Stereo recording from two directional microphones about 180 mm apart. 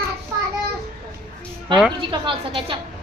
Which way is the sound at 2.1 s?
25° right (ahead or behind).